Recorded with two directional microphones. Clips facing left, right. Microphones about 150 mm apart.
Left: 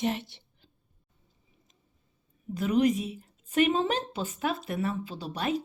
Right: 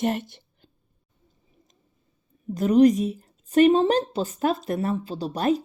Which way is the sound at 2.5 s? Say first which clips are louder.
Right 8 dB; 40° right (ahead or behind).